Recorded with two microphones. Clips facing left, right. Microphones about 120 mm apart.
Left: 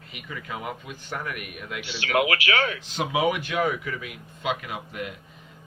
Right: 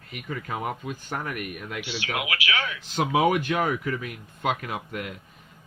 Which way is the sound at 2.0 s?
40° left (ahead or behind).